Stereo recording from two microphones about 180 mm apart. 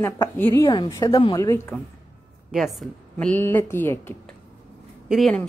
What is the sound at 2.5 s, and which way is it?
Speech, centre (ahead or behind).